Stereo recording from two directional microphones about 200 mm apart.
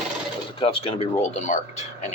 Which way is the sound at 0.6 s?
25° left (ahead or behind).